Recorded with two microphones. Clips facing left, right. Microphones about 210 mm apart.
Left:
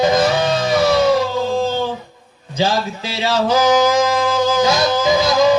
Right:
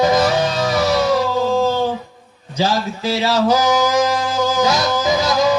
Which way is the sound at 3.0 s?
40° right (ahead or behind).